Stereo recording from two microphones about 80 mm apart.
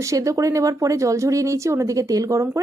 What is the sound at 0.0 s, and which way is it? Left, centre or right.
Speech, right.